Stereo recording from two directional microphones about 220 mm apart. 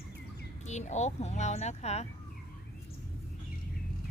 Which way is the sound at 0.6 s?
30° left (ahead or behind).